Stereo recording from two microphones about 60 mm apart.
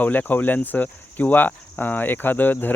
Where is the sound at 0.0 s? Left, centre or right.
Left.